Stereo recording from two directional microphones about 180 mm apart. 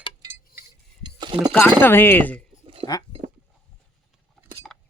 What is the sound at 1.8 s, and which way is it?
Speech, 10° left (ahead or behind).